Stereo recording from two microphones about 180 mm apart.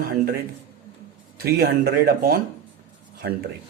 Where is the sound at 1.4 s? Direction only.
60° right (ahead or behind).